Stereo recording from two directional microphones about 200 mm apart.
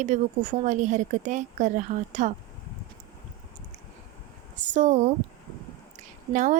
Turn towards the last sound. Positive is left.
turn(degrees=-40)  # may be behind; listen again after turning